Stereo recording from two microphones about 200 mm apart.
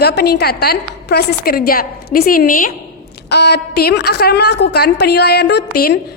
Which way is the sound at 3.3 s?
55° left (ahead or behind).